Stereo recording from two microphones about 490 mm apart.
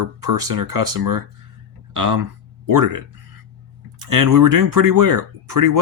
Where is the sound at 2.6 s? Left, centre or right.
Right.